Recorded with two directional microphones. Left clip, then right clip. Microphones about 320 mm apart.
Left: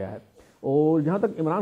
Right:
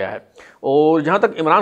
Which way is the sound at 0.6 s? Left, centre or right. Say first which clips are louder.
Right 8 dB; right.